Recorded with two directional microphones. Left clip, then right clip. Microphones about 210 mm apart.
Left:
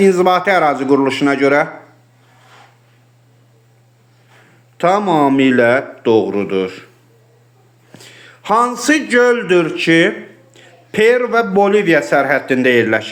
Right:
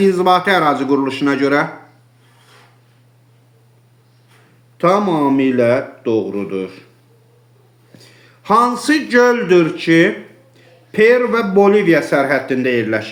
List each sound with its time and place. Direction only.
0.0 s speech: centre (ahead or behind)
4.9 s speech: 5° left (ahead or behind)
7.9 s a man's voice: 10° left (ahead or behind)
10.9 s speech: centre (ahead or behind)